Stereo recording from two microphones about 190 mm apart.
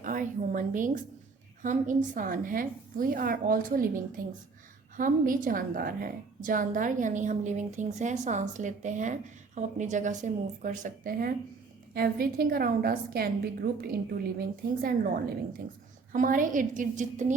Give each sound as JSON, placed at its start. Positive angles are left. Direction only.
{"t": 0.0, "sound": "a woman's voice", "side_deg": -45}
{"t": 16.1, "sound": "a woman's voice", "side_deg": -45}